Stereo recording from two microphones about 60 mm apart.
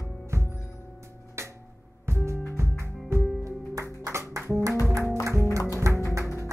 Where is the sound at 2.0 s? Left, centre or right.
Right.